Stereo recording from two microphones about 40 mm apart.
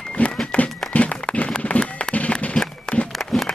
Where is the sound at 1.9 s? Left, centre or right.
Left.